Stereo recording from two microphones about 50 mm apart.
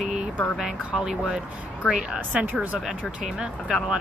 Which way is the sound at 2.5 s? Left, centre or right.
Right.